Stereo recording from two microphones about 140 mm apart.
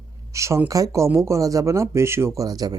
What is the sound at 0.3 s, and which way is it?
Speech, 20° right (ahead or behind).